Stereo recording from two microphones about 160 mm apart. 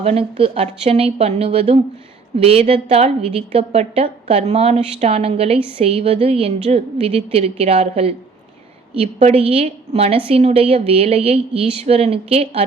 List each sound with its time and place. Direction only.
0.0 s a woman's voice: 40° right (ahead or behind)